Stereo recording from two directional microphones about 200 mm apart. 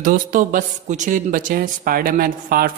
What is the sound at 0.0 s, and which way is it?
Speech, 40° right (ahead or behind).